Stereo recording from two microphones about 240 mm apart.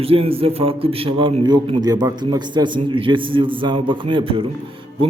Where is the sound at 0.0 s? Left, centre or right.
Right.